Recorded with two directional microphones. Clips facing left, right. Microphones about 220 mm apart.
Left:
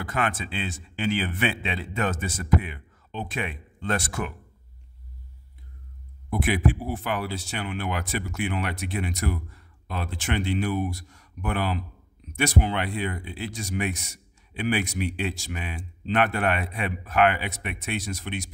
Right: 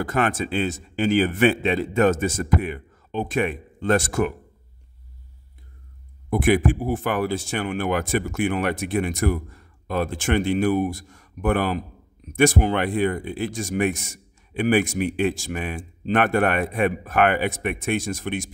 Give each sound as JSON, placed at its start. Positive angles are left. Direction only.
{"t": 0.0, "sound": "speech", "side_deg": -45}
{"t": 6.3, "sound": "speech", "side_deg": -50}